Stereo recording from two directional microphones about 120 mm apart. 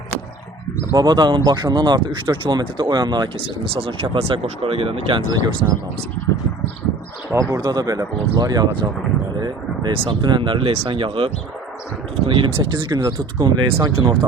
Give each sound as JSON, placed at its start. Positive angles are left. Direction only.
{"t": 0.9, "sound": "speech", "side_deg": -40}
{"t": 7.3, "sound": "speech", "side_deg": -30}